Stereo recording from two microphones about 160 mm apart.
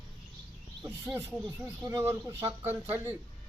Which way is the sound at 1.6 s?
20° right (ahead or behind).